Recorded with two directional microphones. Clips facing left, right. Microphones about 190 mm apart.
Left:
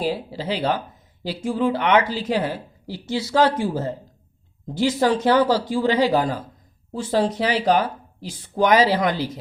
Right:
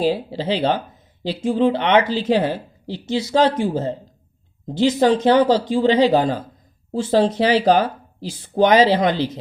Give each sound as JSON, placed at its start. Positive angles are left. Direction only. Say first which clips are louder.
{"t": 0.0, "sound": "speech", "louder": "right 5 dB", "side_deg": -30}